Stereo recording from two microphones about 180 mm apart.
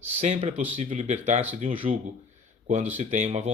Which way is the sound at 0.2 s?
40° right (ahead or behind).